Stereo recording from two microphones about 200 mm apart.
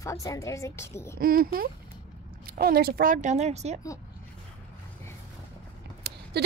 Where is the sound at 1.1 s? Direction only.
45° right (ahead or behind).